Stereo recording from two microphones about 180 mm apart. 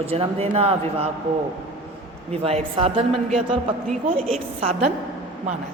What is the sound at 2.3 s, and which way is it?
A man's voice, 35° right (ahead or behind).